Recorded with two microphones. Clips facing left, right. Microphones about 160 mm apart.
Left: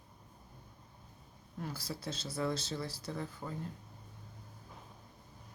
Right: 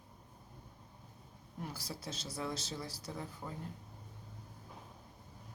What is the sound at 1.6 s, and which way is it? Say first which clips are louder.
Speech: left 3 dB; 15° right (ahead or behind).